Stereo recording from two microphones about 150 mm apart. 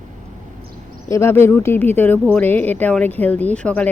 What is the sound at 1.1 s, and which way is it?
Speech, 15° left (ahead or behind).